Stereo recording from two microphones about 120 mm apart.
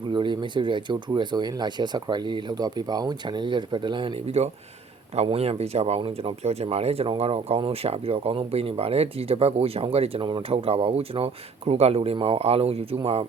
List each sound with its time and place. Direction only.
0.1 s speech: 40° right (ahead or behind)
4.4 s speech: 65° right (ahead or behind)